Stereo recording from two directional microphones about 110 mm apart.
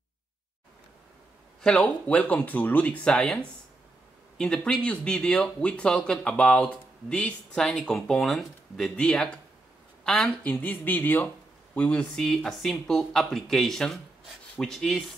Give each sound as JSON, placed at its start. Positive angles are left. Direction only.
{"t": 1.6, "sound": "speech", "side_deg": 10}